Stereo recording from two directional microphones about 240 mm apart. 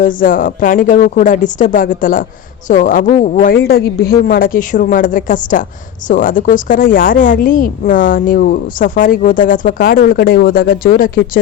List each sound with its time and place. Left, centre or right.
0.0 s a woman's voice: left